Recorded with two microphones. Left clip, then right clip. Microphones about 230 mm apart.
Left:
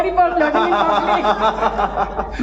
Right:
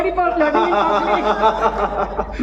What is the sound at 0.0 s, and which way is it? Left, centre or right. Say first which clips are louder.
A woman's voice: left 2 dB; left.